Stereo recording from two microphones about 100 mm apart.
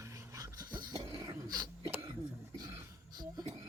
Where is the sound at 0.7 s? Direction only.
45° right (ahead or behind).